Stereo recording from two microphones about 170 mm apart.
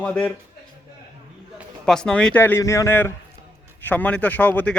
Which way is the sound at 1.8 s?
5° left (ahead or behind).